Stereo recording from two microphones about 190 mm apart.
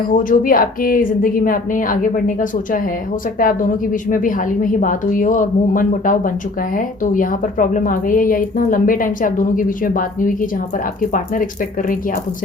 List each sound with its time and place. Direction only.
0.1 s speech: 45° left (ahead or behind)